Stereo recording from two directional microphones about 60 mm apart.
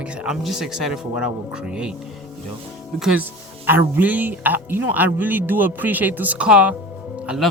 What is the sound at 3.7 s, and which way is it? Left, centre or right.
Speech, right.